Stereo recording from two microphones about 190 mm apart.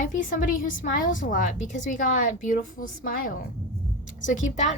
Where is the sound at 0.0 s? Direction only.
45° left (ahead or behind).